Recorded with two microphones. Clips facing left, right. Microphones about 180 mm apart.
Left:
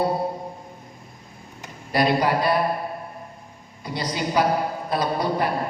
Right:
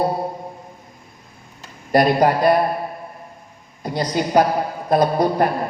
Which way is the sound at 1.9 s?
50° right (ahead or behind).